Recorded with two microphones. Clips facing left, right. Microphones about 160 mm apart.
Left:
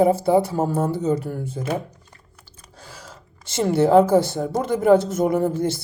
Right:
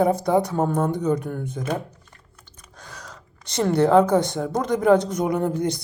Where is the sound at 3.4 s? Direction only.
5° left (ahead or behind).